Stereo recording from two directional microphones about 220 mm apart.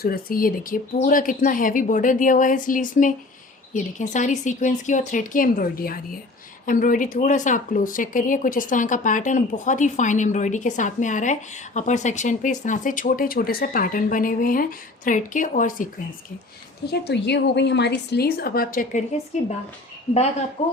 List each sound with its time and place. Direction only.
0.0 s speech: 40° left (ahead or behind)
16.8 s a woman's voice: 50° left (ahead or behind); by 19.5 s 30° left (ahead or behind)
20.6 s speech: 25° left (ahead or behind)